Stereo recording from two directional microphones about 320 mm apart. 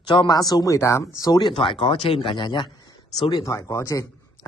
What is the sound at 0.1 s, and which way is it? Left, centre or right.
Speech, centre.